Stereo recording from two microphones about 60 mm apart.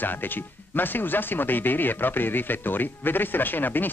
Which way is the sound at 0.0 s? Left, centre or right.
Left.